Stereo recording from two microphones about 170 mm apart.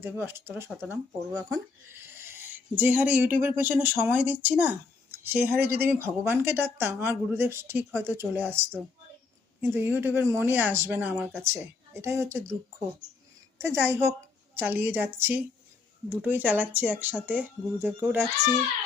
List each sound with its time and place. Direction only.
0.0 s speech: 15° right (ahead or behind)
13.6 s speech: 15° right (ahead or behind)